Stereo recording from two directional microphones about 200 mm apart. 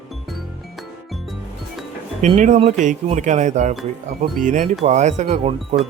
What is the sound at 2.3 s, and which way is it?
Speech, 35° right (ahead or behind).